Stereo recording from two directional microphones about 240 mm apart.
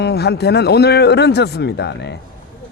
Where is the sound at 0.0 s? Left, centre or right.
Left.